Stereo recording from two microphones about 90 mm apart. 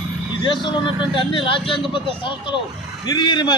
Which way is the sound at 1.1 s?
65° left (ahead or behind).